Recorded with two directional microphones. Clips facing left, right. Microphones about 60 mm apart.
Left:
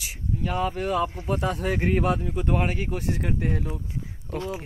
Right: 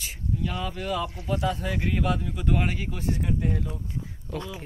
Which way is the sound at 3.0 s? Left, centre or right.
Left.